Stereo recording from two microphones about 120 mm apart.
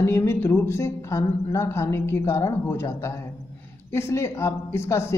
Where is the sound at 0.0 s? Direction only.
25° left (ahead or behind).